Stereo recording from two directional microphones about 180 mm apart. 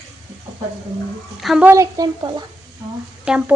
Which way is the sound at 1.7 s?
20° right (ahead or behind).